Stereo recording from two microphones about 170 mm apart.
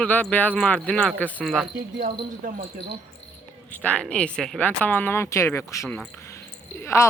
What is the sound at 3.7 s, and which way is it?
Speech, 10° left (ahead or behind).